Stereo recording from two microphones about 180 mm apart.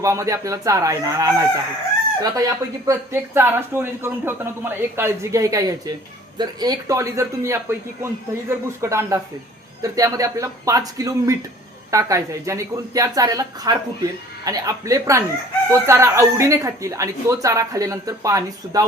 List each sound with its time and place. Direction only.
0.0 s speech: 15° right (ahead or behind)